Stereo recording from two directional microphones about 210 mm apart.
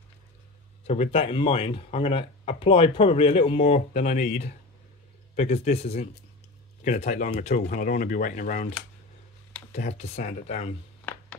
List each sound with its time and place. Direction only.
0.8 s speech: 30° left (ahead or behind)